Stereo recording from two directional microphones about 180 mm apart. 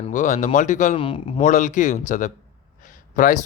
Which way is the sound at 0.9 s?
30° left (ahead or behind).